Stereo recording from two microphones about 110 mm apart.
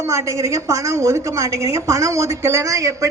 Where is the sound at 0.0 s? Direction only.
25° right (ahead or behind).